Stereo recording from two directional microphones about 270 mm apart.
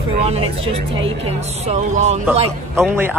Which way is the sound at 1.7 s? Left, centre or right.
Right.